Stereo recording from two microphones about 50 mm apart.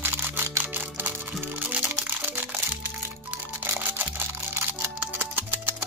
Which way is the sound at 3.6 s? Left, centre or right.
Right.